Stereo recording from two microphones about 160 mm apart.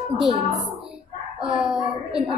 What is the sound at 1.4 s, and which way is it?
Speech, 5° right (ahead or behind).